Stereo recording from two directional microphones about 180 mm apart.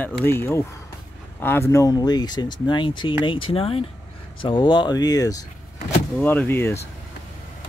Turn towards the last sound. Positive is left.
turn(degrees=15)  # may be behind; listen again after turning